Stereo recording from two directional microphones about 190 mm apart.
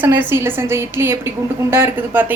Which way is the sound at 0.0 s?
10° right (ahead or behind).